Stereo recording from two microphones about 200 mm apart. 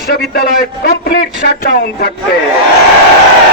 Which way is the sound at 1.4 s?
50° left (ahead or behind).